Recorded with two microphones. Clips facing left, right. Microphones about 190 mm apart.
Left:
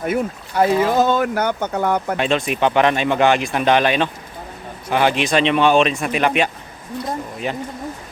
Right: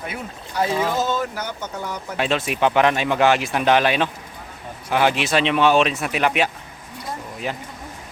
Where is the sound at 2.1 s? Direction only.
5° right (ahead or behind).